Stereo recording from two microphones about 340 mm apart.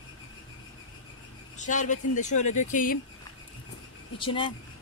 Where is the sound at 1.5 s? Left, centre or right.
Left.